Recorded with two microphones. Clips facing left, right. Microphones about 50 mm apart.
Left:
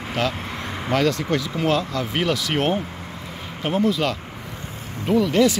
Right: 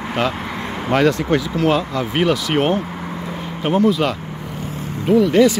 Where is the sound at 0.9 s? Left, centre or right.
Right; by 2.7 s centre.